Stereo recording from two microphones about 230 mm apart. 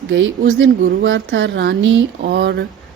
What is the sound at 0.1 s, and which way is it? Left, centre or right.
A woman's voice, right.